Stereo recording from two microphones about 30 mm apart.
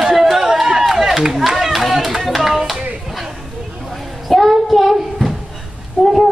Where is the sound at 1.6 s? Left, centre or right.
Centre.